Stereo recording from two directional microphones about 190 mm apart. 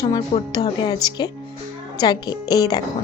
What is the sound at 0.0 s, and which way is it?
A woman's voice, 20° left (ahead or behind).